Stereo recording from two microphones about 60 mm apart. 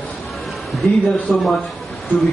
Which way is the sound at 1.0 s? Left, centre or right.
Centre.